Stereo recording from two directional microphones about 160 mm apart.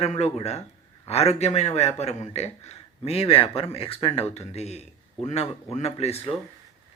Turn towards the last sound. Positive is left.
turn(degrees=40)  # may be behind; listen again after turning